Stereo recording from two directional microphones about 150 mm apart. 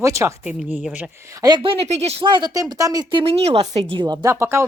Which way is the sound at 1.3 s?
25° right (ahead or behind).